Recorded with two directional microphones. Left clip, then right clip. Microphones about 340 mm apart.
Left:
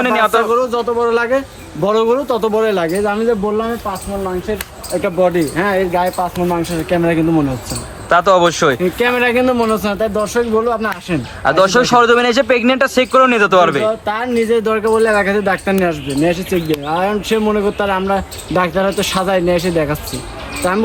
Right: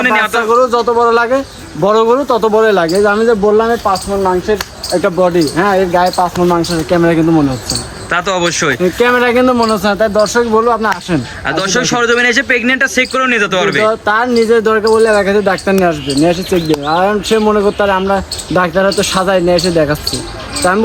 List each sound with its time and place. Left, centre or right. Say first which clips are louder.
0.0 s a man's voice: right 1 dB; centre
0.5 s speech: right 5 dB; centre
5.0 s speech: right 3 dB; centre
8.1 s a man's voice: left 3 dB; centre
8.8 s speech: right 4 dB; centre
11.4 s a man's voice: left 3 dB; centre
13.8 s speech: right 6 dB; centre